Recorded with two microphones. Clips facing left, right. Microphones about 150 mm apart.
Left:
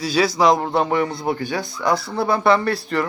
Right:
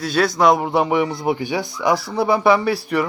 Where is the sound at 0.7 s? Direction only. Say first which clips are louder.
Right 2 dB; 15° right (ahead or behind).